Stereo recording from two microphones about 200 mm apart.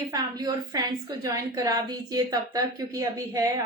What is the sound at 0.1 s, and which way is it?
A woman's voice, 20° right (ahead or behind).